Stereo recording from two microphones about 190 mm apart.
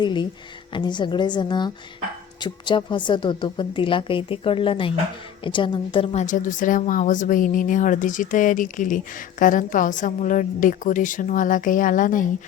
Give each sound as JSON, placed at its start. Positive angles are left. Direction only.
{"t": 0.0, "sound": "a woman's voice", "side_deg": 25}
{"t": 6.2, "sound": "speech", "side_deg": 40}